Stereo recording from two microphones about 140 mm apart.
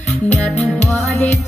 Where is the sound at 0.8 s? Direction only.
55° left (ahead or behind).